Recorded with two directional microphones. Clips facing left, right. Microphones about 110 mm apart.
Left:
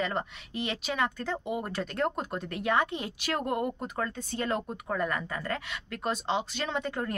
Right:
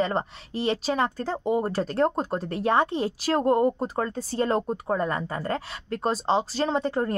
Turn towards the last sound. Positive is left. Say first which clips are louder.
# right 7 dB
turn(degrees=-35)  # may be behind; listen again after turning